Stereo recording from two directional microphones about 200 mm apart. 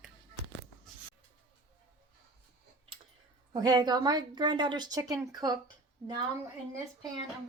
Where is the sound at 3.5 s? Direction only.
20° right (ahead or behind).